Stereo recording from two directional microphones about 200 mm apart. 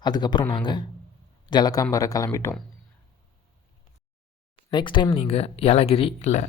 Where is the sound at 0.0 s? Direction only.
20° left (ahead or behind).